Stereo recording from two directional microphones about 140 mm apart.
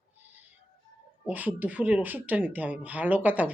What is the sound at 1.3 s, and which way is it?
Speech, 10° right (ahead or behind).